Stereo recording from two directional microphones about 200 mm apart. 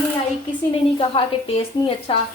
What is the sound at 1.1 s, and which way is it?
A woman's voice, 25° left (ahead or behind).